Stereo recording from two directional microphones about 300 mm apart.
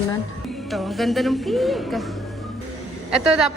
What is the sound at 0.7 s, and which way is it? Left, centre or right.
Speech, centre.